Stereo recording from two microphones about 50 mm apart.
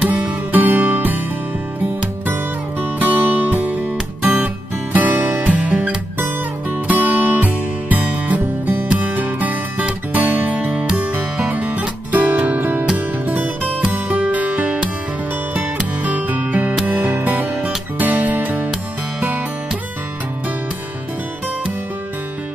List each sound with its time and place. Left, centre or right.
0.0 s music: right
2.8 s music: right
4.9 s music: right
6.9 s music: right
8.8 s music: right
9.1 s music: right
12.9 s music: right
16.0 s music: right